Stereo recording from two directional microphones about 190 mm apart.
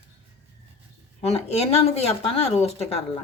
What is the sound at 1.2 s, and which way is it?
Speech, 35° left (ahead or behind).